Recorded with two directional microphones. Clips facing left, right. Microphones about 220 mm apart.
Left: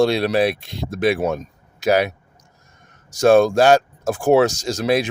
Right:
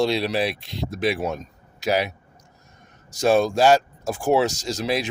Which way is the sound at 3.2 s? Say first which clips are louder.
Left 5 dB; 50° left (ahead or behind).